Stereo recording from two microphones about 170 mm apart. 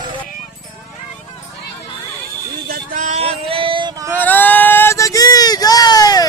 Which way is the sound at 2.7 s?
60° right (ahead or behind).